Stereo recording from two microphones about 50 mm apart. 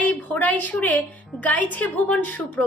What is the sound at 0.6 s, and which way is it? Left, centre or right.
A woman's voice, left.